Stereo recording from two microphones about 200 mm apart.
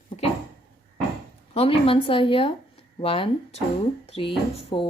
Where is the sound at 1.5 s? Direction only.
30° left (ahead or behind).